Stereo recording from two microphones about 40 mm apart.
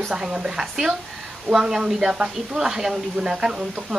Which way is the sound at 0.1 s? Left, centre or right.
Centre.